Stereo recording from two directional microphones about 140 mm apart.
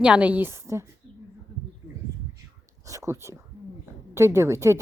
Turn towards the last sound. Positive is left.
turn(degrees=-20)  # may be behind; listen again after turning